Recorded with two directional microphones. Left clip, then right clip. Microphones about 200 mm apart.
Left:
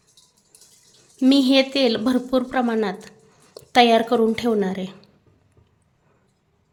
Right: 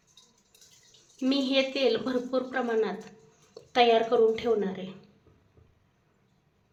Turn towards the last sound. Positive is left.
turn(degrees=55)  # may be behind; listen again after turning